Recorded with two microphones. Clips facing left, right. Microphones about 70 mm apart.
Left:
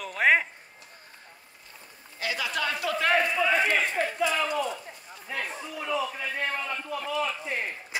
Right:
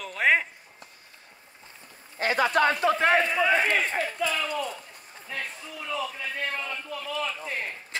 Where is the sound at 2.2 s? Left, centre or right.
Right.